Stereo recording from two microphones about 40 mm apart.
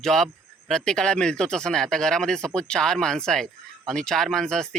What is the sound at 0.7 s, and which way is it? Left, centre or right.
Speech, centre.